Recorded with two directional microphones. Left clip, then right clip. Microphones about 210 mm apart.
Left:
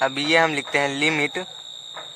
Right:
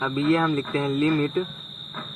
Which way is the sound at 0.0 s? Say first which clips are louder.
Left 4 dB; 55° left (ahead or behind).